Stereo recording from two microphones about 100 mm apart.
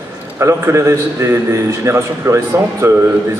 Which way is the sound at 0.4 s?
30° right (ahead or behind).